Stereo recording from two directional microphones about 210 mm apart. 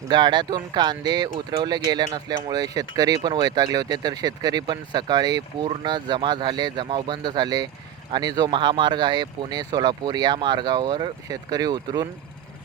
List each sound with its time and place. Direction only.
0.1 s speech: 20° right (ahead or behind)